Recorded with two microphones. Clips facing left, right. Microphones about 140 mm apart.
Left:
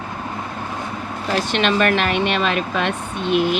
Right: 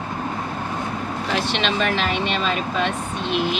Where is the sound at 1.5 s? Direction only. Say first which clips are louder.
Left 7 dB; 55° left (ahead or behind).